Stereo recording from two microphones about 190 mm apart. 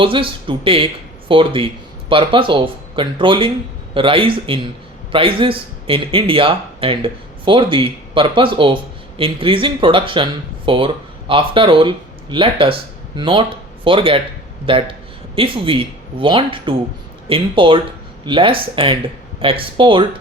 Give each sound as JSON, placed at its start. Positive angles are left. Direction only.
{"t": 0.0, "sound": "speech", "side_deg": -25}